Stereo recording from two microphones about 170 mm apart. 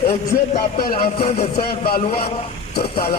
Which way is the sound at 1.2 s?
40° left (ahead or behind).